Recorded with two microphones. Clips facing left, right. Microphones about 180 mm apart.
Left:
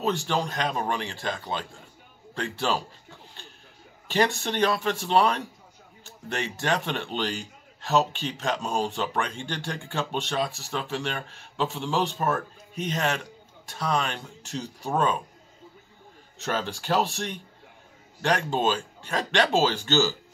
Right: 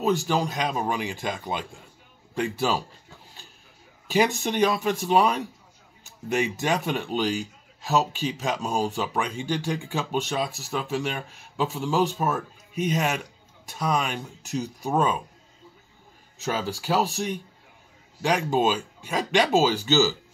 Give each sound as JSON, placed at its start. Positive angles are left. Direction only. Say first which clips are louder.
{"t": 0.0, "sound": "a man's voice", "louder": "right 3 dB", "side_deg": -5}
{"t": 4.1, "sound": "a man's voice", "louder": "right 2 dB", "side_deg": -10}
{"t": 16.3, "sound": "a man's voice", "louder": "right 1 dB", "side_deg": -5}